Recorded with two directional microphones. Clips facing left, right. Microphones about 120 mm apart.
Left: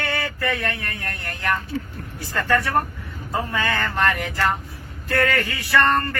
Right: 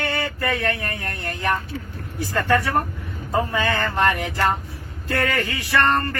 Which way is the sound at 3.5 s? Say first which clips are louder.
Right 2 dB; 15° right (ahead or behind).